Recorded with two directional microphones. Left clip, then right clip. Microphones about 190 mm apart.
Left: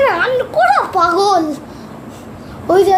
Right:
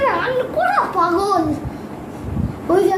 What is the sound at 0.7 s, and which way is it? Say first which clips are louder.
Speech: left 4 dB; 50° left (ahead or behind).